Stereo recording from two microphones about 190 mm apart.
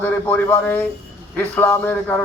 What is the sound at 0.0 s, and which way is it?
A man's voice, 10° left (ahead or behind).